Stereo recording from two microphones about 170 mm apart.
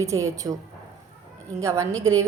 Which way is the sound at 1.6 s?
20° right (ahead or behind).